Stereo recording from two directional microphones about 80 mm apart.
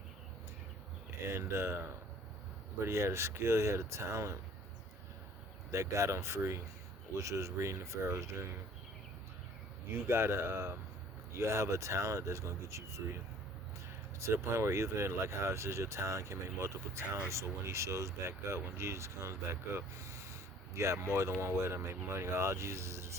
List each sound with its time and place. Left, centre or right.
1.3 s speech: right
5.7 s speech: right
9.9 s speech: right
14.2 s speech: right